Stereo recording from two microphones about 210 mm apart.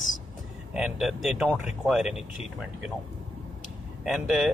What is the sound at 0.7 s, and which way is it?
Speech, 5° right (ahead or behind).